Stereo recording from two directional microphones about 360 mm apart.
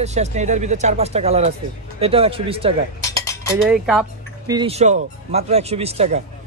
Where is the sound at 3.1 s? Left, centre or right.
Centre.